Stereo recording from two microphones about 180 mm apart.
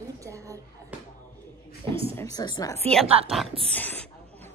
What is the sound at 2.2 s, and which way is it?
Speech, 20° left (ahead or behind).